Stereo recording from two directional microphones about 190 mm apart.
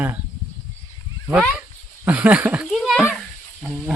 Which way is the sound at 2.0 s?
10° right (ahead or behind).